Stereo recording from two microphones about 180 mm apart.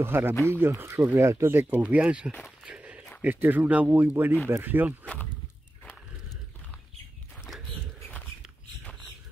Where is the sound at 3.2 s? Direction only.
10° right (ahead or behind).